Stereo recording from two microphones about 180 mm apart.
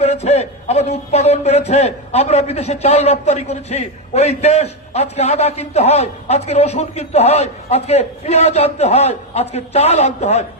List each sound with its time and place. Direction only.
0.0 s a man's voice: 35° left (ahead or behind)